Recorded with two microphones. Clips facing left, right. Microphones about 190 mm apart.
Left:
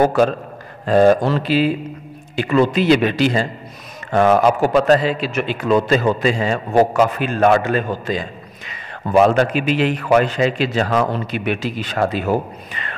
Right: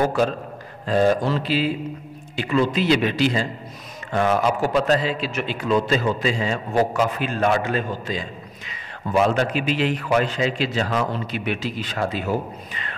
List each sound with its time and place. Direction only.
0.1 s a man's voice: 60° left (ahead or behind)